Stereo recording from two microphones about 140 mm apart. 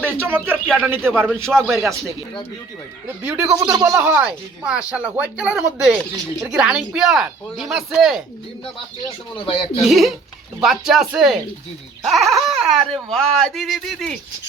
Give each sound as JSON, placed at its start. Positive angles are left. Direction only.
{"t": 0.0, "sound": "speech", "side_deg": -15}
{"t": 3.2, "sound": "speech", "side_deg": -15}
{"t": 9.5, "sound": "speech", "side_deg": 40}
{"t": 9.8, "sound": "speech", "side_deg": 0}